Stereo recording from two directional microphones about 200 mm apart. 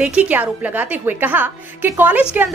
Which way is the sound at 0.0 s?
5° right (ahead or behind).